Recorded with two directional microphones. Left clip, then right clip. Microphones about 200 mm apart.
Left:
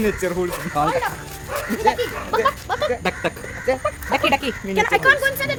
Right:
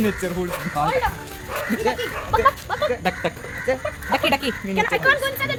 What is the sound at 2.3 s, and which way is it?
Speech, 60° left (ahead or behind).